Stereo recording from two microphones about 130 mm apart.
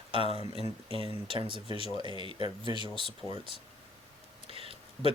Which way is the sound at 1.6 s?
50° left (ahead or behind).